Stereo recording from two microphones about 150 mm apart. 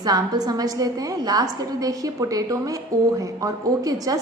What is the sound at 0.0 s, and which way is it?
A woman's voice, 25° right (ahead or behind).